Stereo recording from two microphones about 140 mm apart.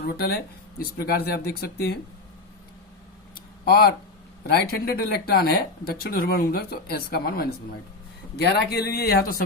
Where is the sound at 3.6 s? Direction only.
90° left.